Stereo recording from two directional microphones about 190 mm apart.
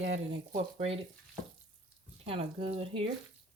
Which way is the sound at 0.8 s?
30° right (ahead or behind).